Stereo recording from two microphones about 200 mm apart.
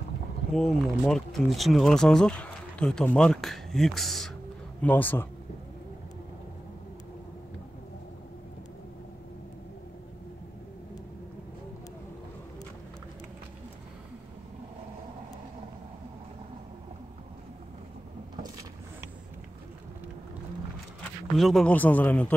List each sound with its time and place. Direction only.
0.5 s speech: centre (ahead or behind)
18.3 s vehicle: 20° right (ahead or behind)
21.0 s a man's voice: centre (ahead or behind)